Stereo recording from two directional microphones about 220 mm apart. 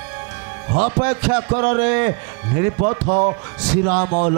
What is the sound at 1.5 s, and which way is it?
Speech, 25° right (ahead or behind).